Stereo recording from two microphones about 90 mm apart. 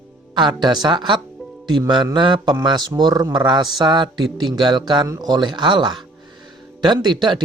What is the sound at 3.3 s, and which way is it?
Speech, 60° right (ahead or behind).